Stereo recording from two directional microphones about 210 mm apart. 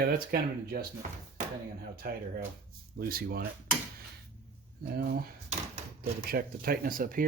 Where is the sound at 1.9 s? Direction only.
45° right (ahead or behind).